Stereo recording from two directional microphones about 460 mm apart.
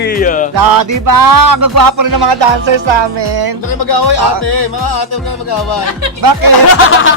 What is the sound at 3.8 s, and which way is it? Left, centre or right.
Speech, left.